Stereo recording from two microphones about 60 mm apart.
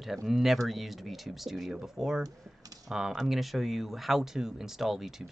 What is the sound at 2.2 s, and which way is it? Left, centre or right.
Speech, right.